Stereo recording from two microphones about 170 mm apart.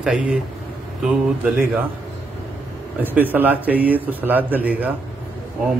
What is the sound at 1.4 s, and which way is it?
Speech, 10° right (ahead or behind).